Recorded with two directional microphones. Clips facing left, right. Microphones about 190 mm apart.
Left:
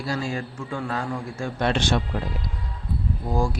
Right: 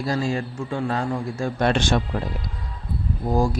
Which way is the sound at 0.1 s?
35° right (ahead or behind).